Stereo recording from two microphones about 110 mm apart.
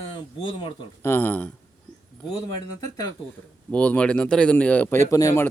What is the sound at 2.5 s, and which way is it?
Speech, 35° left (ahead or behind).